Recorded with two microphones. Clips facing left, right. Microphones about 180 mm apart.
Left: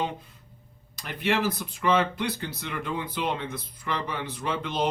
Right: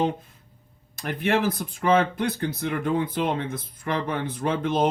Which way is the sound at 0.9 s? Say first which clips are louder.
Right 3 dB; 50° right (ahead or behind).